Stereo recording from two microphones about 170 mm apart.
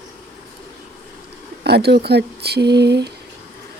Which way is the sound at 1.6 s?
70° right (ahead or behind).